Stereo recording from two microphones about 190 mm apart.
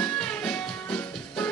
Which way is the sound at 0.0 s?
5° left (ahead or behind).